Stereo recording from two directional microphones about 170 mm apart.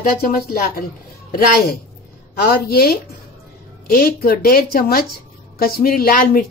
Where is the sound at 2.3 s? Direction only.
65° left (ahead or behind).